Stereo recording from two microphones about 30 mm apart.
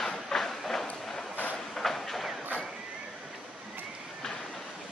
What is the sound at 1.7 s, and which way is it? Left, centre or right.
Train, centre.